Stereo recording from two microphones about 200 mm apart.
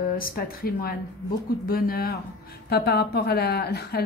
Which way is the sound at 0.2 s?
45° left (ahead or behind).